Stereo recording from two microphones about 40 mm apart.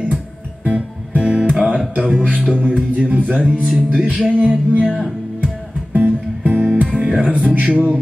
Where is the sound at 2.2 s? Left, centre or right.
Right.